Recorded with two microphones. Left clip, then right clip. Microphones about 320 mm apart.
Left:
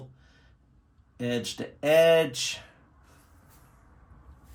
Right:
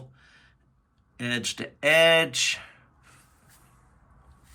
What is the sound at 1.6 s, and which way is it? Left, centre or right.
Speech, centre.